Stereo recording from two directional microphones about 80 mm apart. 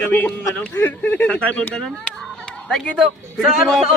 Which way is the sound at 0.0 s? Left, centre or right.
Left.